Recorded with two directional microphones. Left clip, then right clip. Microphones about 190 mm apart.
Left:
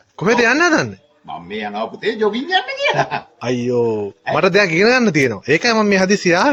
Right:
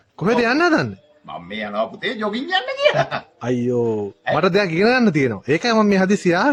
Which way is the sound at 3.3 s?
25° right (ahead or behind).